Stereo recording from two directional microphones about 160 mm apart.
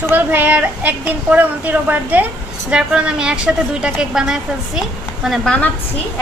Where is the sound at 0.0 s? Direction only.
15° right (ahead or behind); by 5.7 s 5° left (ahead or behind).